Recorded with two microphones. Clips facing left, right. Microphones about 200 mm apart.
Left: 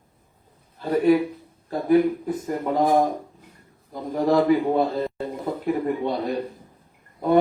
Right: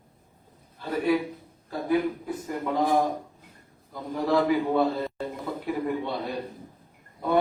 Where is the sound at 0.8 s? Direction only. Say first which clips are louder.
Left 6 dB; 45° left (ahead or behind).